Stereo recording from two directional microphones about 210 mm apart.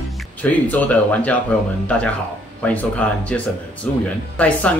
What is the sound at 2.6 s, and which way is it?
Speech, 5° left (ahead or behind).